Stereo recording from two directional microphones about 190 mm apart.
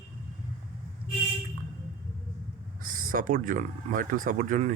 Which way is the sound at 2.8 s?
45° right (ahead or behind).